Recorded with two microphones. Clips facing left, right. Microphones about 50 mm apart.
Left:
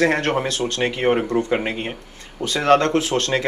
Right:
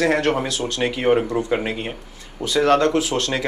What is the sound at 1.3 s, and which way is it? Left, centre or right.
Speech, centre.